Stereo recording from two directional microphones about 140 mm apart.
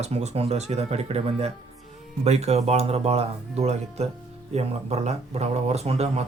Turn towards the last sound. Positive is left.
turn(degrees=-50)  # may be behind; listen again after turning